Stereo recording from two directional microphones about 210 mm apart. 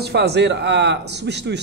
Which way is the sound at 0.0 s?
50° right (ahead or behind).